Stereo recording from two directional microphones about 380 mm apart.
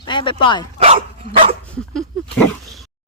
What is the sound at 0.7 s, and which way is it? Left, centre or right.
Dog, centre.